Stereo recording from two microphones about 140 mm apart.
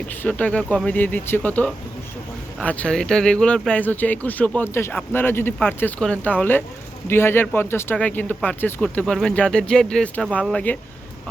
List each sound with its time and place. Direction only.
0.1 s speech: 10° left (ahead or behind)